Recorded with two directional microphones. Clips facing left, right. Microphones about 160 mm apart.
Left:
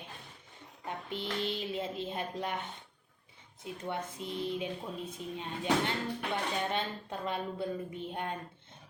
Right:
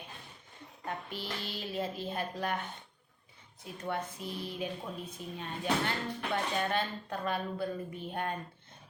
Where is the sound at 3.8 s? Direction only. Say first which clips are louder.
Right 2 dB; 20° left (ahead or behind).